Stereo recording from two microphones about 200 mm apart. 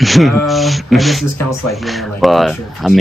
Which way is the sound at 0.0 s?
Centre (ahead or behind).